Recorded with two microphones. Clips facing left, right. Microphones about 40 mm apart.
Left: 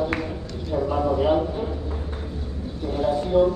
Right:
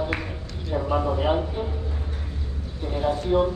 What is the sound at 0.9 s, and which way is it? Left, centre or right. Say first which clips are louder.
Speech: left 2 dB; centre.